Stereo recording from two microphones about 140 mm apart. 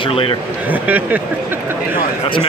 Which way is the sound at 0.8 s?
10° right (ahead or behind).